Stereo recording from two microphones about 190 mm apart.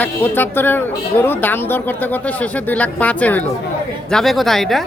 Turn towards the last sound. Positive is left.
turn(degrees=0)  # may be behind; listen again after turning